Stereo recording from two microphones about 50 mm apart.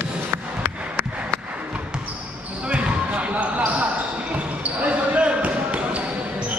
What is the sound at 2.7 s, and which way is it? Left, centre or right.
Basketball bounce, right.